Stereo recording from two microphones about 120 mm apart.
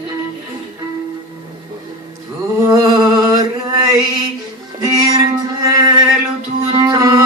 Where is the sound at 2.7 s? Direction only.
30° right (ahead or behind).